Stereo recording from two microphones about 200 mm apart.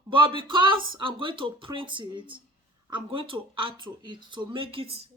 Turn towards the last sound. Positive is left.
turn(degrees=-30)  # may be behind; listen again after turning